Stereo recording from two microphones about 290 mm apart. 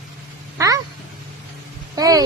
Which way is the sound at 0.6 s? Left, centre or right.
Centre.